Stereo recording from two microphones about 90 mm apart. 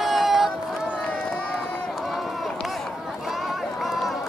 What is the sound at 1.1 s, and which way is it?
Run, 10° left (ahead or behind).